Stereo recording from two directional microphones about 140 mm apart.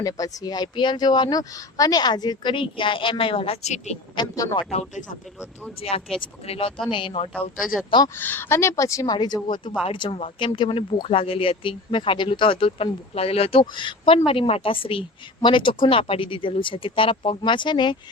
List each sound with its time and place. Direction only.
0.0 s speech: 25° left (ahead or behind); by 3.9 s 55° left (ahead or behind)
4.1 s speech: 30° left (ahead or behind)
4.7 s speech: 55° left (ahead or behind)
6.1 s speech: 40° left (ahead or behind)
8.1 s speech: 15° left (ahead or behind); by 17.9 s 35° left (ahead or behind)